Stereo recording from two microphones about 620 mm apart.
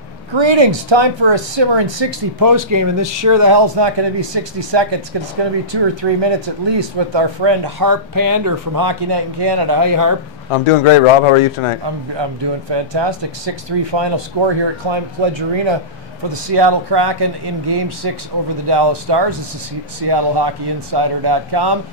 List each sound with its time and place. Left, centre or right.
0.3 s speech: right
10.5 s a man's voice: left
11.8 s speech: right